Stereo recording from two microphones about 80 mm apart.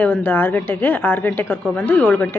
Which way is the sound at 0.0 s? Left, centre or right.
Left.